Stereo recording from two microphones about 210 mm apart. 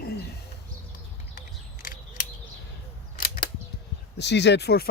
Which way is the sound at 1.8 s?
40° left (ahead or behind).